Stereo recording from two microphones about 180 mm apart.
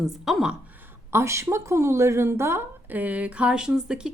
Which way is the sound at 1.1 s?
15° right (ahead or behind).